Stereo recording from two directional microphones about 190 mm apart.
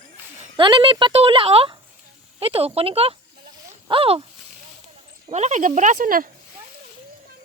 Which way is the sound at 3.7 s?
25° right (ahead or behind).